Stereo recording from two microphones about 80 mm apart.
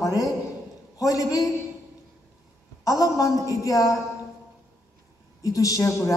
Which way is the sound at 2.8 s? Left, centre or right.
Left.